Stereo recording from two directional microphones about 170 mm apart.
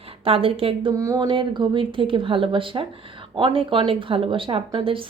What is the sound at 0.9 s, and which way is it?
A woman's voice, 20° right (ahead or behind).